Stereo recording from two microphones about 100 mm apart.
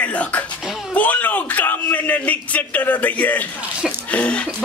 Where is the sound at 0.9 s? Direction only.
15° left (ahead or behind).